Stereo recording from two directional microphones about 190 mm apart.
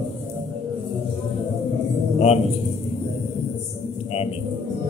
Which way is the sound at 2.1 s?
35° left (ahead or behind).